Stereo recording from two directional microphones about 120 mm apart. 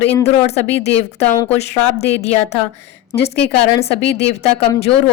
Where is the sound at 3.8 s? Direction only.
60° left (ahead or behind).